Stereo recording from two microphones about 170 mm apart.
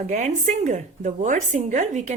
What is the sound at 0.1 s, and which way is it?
Speech, 45° right (ahead or behind).